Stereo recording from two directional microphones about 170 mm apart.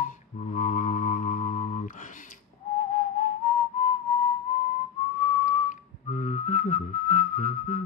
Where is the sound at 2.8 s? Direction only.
50° left (ahead or behind).